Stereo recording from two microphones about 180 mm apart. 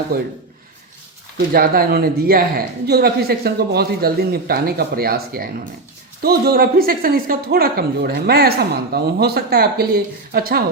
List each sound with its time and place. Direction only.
1.5 s speech: 55° right (ahead or behind)